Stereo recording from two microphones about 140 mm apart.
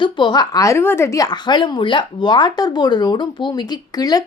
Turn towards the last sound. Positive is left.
turn(degrees=30)  # may be behind; listen again after turning